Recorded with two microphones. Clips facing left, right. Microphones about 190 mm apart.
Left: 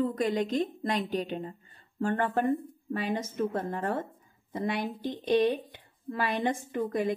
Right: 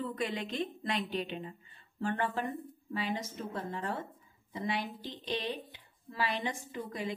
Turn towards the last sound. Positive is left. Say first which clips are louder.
# left 9 dB
turn(degrees=50)  # may be behind; listen again after turning